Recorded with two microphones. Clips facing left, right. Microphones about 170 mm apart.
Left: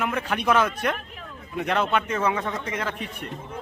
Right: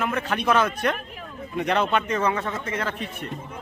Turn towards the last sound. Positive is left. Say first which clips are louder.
# right 1 dB
turn(degrees=10)  # may be behind; listen again after turning